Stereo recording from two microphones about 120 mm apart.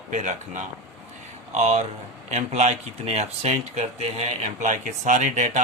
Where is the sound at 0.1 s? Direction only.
80° right.